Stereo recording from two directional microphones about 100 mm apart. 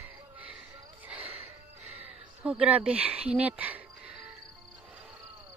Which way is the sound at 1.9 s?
15° right (ahead or behind).